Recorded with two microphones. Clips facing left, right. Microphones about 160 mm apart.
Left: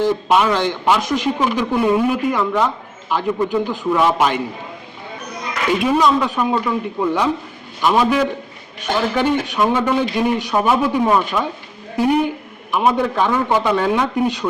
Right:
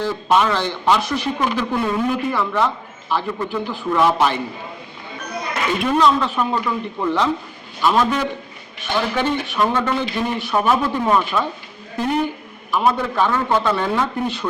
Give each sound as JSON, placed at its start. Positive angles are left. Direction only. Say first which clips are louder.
{"t": 0.0, "sound": "a man's voice", "louder": "left 2 dB", "side_deg": 15}
{"t": 5.8, "sound": "a man's voice", "louder": "even", "side_deg": 10}